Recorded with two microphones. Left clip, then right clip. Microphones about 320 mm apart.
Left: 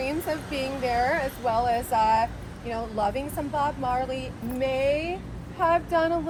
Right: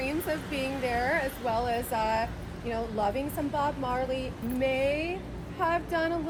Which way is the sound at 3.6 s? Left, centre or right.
Centre.